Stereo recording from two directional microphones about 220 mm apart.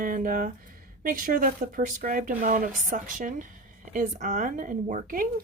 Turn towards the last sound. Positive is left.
turn(degrees=-40)  # may be behind; listen again after turning